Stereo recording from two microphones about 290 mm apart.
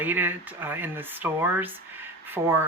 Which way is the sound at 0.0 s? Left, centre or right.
Centre.